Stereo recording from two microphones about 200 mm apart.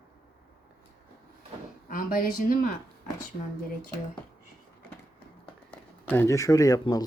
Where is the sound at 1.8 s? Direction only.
45° left (ahead or behind).